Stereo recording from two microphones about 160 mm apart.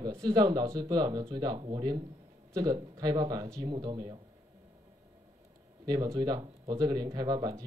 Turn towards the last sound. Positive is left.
turn(degrees=-25)  # may be behind; listen again after turning